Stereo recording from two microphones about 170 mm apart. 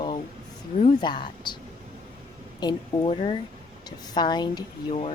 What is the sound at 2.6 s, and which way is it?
Speech, 25° left (ahead or behind).